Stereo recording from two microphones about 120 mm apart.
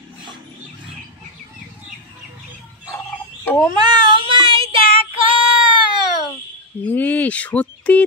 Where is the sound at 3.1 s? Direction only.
10° left (ahead or behind).